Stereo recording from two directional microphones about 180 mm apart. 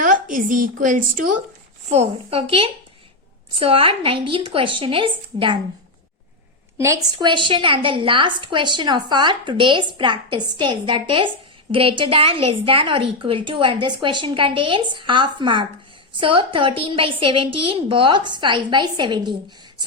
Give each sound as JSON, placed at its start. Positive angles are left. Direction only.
{"t": 0.0, "sound": "a woman's voice", "side_deg": -45}
{"t": 1.9, "sound": "a woman's voice", "side_deg": -35}
{"t": 6.7, "sound": "a woman's voice", "side_deg": -15}